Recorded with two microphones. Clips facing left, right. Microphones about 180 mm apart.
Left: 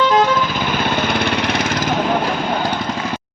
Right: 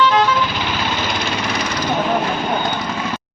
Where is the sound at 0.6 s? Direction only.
55° left (ahead or behind).